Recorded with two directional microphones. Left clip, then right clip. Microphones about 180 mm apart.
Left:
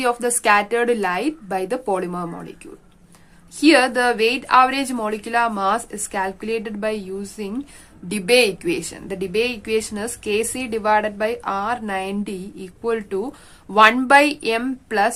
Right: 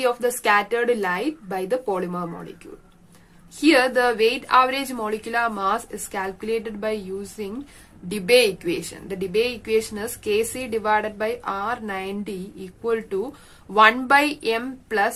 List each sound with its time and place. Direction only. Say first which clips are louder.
0.0 s speech: left 2 dB; 35° left (ahead or behind)
3.6 s speech: left 2 dB; 30° left (ahead or behind)